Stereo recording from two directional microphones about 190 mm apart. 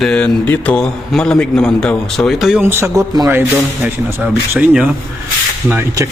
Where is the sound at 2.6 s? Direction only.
15° right (ahead or behind).